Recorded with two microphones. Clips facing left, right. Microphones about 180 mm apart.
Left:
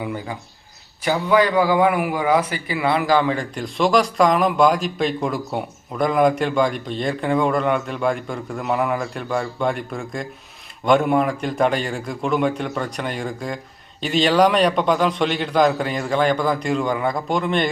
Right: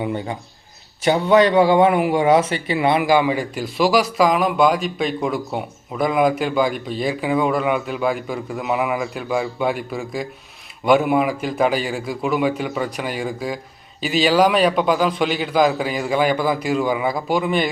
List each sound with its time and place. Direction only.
0.0 s a man's voice: 25° right (ahead or behind); by 17.7 s 5° right (ahead or behind)